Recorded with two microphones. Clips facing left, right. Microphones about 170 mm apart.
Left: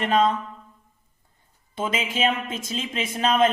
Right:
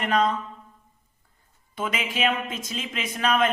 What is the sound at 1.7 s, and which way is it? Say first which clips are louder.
Speech: left 2 dB; 25° left (ahead or behind).